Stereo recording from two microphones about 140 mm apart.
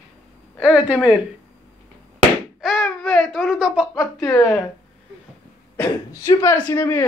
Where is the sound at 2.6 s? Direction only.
Centre (ahead or behind).